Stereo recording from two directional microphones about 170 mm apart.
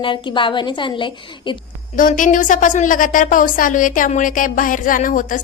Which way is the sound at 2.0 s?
50° left (ahead or behind).